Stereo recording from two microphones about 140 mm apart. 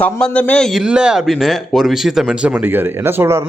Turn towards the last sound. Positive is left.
turn(degrees=-15)  # may be behind; listen again after turning